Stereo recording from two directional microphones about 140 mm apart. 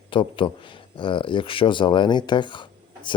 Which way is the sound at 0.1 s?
35° left (ahead or behind).